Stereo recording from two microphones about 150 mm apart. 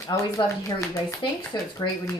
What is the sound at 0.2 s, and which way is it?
Speech, 20° left (ahead or behind).